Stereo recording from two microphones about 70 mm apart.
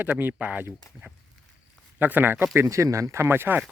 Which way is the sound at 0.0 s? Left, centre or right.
Right.